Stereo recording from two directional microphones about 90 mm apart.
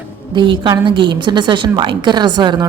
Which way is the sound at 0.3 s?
60° right (ahead or behind).